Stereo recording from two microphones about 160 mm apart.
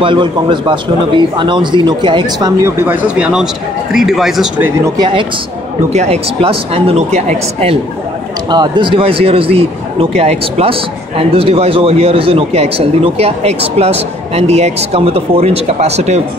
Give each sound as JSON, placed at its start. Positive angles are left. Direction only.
{"t": 0.0, "sound": "a man's voice", "side_deg": -30}
{"t": 4.6, "sound": "speech", "side_deg": -10}
{"t": 4.9, "sound": "a man's voice", "side_deg": -30}
{"t": 8.5, "sound": "a man's voice", "side_deg": -30}